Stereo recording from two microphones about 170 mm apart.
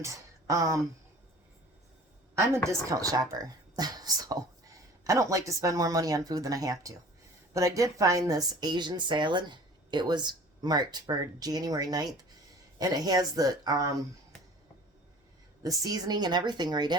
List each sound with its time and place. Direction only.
0.0 s speech: 20° right (ahead or behind)
2.6 s a woman's voice: 20° right (ahead or behind)
15.6 s a woman's voice: 20° right (ahead or behind)